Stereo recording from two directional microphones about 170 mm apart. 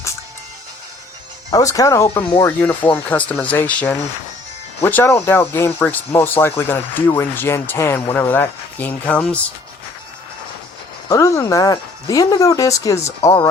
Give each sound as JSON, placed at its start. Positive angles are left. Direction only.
{"t": 1.5, "sound": "speech", "side_deg": 20}
{"t": 11.1, "sound": "speech", "side_deg": 20}